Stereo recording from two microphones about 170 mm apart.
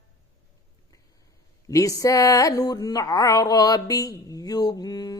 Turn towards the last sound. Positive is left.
turn(degrees=20)  # may be behind; listen again after turning